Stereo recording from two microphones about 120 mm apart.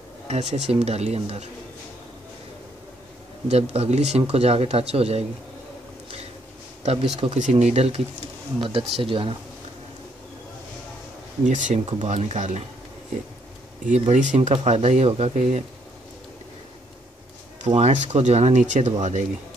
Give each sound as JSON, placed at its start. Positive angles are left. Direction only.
{"t": 0.3, "sound": "speech", "side_deg": -65}
{"t": 3.4, "sound": "speech", "side_deg": -60}
{"t": 6.8, "sound": "speech", "side_deg": -65}
{"t": 7.3, "sound": "speech", "side_deg": -85}
{"t": 8.5, "sound": "speech", "side_deg": -45}
{"t": 11.4, "sound": "speech", "side_deg": -90}
{"t": 13.8, "sound": "speech", "side_deg": -80}
{"t": 17.6, "sound": "speech", "side_deg": -70}